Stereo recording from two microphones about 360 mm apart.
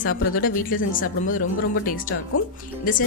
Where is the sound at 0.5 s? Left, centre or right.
Left.